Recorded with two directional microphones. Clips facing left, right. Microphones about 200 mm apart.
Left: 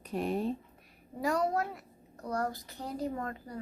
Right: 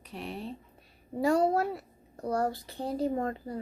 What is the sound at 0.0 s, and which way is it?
Speech, 45° left (ahead or behind).